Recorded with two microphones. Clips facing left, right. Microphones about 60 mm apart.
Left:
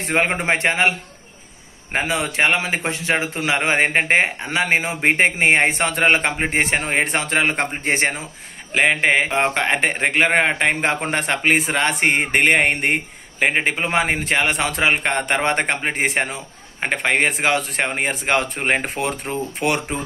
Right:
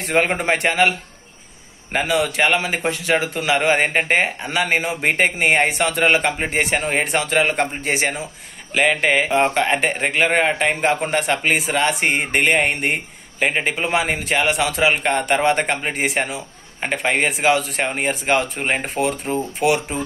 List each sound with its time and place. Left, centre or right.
0.0 s a man's voice: left
13.4 s a man's voice: left